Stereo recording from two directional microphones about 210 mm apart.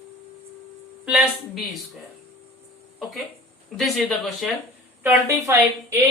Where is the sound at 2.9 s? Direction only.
Centre (ahead or behind).